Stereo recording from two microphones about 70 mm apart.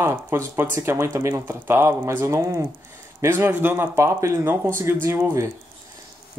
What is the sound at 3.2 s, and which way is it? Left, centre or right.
Speech, right.